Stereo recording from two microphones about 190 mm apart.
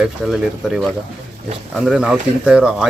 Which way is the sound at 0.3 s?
Centre (ahead or behind).